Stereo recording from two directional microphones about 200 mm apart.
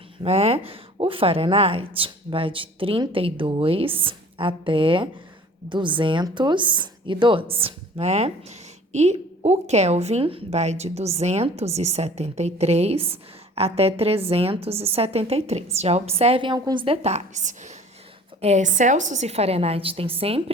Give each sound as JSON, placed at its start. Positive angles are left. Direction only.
{"t": 0.2, "sound": "a woman's voice", "side_deg": -30}